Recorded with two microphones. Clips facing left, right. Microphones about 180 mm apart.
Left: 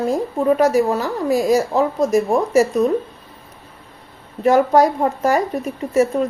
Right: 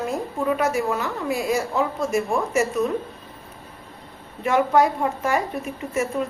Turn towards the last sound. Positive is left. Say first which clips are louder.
# left 8 dB
turn(degrees=35)  # may be behind; listen again after turning